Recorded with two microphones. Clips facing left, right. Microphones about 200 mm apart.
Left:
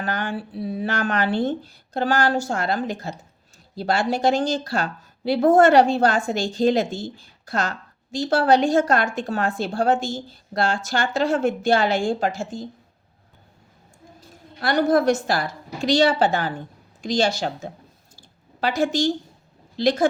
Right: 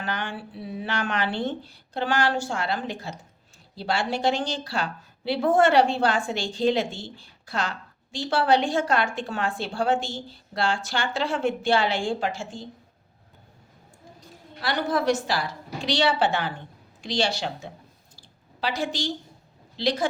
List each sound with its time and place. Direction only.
0.0 s a woman's voice: 40° left (ahead or behind)
14.6 s a woman's voice: 45° left (ahead or behind)
18.2 s a sound: 45° left (ahead or behind)
19.7 s a woman's voice: 45° left (ahead or behind)